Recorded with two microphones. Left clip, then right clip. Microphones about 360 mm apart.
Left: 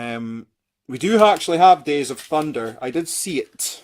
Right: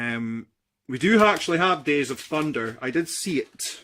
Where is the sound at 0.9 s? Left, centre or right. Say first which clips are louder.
Left 4 dB; centre.